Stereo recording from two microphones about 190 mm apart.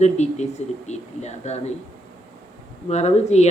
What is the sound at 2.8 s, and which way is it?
Speech, 35° left (ahead or behind).